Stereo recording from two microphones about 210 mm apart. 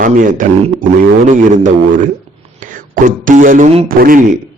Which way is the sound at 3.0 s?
40° right (ahead or behind).